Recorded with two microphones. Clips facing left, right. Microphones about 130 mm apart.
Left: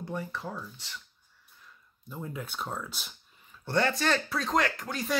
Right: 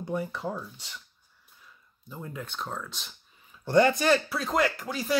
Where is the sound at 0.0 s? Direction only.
15° right (ahead or behind).